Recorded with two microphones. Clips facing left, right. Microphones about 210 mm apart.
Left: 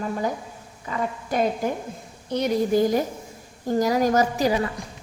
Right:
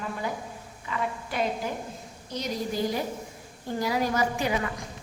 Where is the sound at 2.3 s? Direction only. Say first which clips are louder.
Left 10 dB; 60° left (ahead or behind); by 4.7 s 35° left (ahead or behind).